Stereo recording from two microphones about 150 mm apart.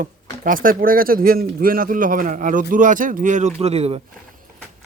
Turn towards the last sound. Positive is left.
turn(degrees=-45)  # may be behind; listen again after turning